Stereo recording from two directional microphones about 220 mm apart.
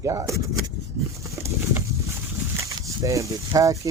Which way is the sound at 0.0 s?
15° right (ahead or behind).